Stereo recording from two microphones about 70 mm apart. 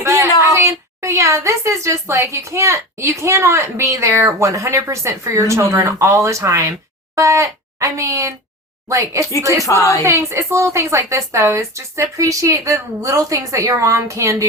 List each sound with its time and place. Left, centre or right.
0.0 s a woman's voice: right
9.6 s a woman's voice: left
10.1 s a woman's voice: right